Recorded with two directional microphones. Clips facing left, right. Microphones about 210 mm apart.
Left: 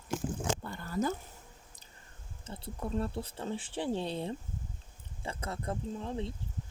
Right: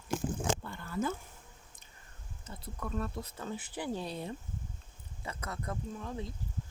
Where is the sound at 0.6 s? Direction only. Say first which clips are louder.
Left 2 dB; 40° left (ahead or behind).